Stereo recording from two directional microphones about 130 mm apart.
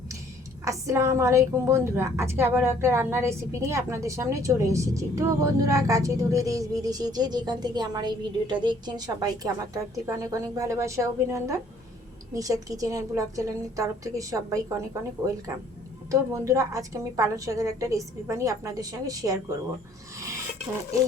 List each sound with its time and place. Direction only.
0.6 s a woman's voice: 25° right (ahead or behind)
16.3 s a woman's voice: 25° right (ahead or behind)